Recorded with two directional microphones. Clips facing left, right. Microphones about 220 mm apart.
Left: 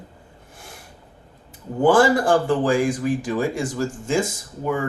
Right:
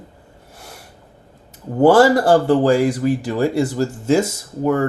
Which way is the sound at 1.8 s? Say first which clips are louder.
Right 4 dB; 40° right (ahead or behind).